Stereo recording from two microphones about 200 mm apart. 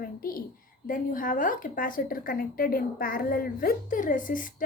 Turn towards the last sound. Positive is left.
turn(degrees=45)  # may be behind; listen again after turning